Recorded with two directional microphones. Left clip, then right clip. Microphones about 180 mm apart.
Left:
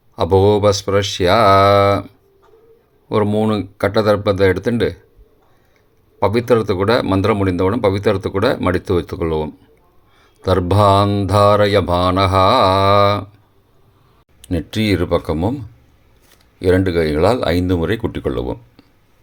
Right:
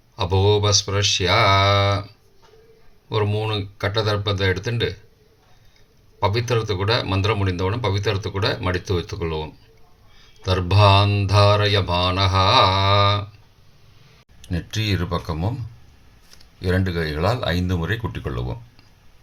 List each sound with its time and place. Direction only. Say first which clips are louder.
0.2 s speech: left 7 dB; 55° left (ahead or behind)
3.1 s speech: left 7 dB; 55° left (ahead or behind)
6.1 s speech: left 7 dB; 55° left (ahead or behind)
14.4 s speech: left 7 dB; 50° left (ahead or behind)
16.6 s speech: left 9 dB; 50° left (ahead or behind)